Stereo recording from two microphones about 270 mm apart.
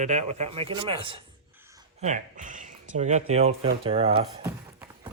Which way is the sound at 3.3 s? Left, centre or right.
Right.